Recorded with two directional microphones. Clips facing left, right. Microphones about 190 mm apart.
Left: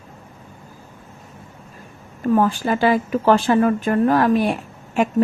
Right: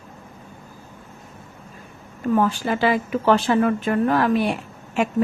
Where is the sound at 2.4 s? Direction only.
45° left (ahead or behind).